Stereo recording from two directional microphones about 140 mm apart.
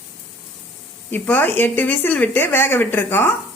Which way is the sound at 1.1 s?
15° left (ahead or behind).